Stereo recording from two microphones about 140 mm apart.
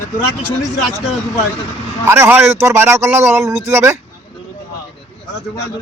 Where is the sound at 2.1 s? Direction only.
15° right (ahead or behind).